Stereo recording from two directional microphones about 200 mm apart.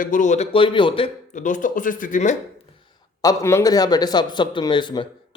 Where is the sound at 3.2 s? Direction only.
15° left (ahead or behind).